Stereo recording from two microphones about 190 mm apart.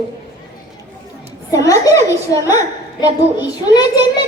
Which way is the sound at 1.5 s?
15° left (ahead or behind).